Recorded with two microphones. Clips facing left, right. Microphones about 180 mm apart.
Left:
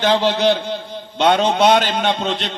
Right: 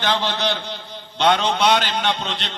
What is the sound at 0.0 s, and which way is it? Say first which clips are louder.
A man's voice: left 7 dB; 40° left (ahead or behind).